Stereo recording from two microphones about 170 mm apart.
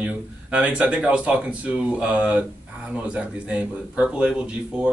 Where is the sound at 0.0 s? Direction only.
5° right (ahead or behind).